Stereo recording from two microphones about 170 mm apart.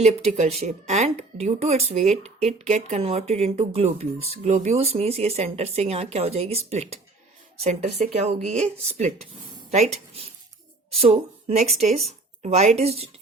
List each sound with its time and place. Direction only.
0.0 s speech: 40° right (ahead or behind)
10.9 s a woman's voice: 35° right (ahead or behind)